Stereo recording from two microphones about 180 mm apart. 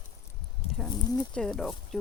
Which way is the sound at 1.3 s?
5° left (ahead or behind).